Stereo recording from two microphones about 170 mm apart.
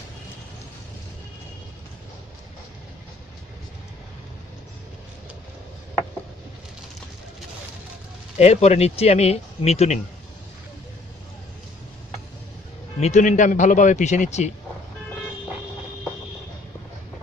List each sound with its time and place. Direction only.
8.4 s speech: 40° left (ahead or behind)
13.0 s a man's voice: 45° left (ahead or behind)